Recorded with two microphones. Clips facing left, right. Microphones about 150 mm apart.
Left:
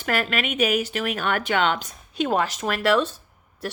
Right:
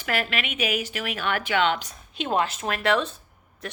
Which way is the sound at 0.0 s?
45° left (ahead or behind).